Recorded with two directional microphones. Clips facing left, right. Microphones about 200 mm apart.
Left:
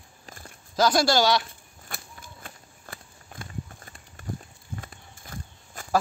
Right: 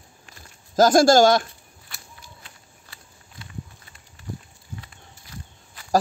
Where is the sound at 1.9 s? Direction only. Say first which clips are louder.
Left 5 dB; 50° left (ahead or behind).